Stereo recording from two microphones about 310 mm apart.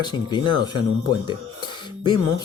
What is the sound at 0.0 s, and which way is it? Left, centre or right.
Speech, centre.